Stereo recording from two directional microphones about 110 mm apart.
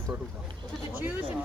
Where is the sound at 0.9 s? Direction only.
20° right (ahead or behind).